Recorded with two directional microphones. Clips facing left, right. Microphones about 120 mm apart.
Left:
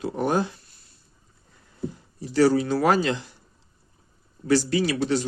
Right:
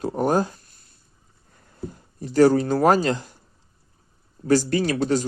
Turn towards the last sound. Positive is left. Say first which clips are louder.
# right 2 dB
turn(degrees=-45)  # may be behind; listen again after turning